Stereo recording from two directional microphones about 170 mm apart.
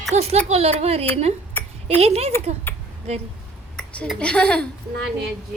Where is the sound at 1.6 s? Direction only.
10° left (ahead or behind).